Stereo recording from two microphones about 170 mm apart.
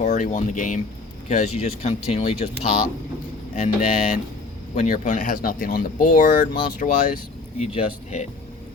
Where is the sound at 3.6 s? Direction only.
50° left (ahead or behind).